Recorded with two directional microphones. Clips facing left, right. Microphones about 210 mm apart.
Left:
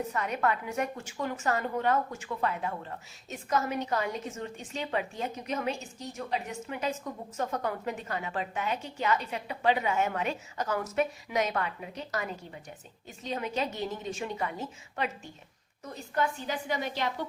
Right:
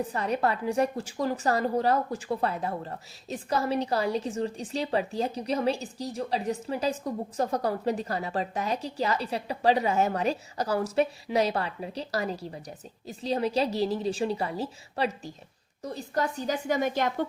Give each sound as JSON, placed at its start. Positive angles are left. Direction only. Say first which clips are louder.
{"t": 0.1, "sound": "a woman's voice", "louder": "right 3 dB", "side_deg": -35}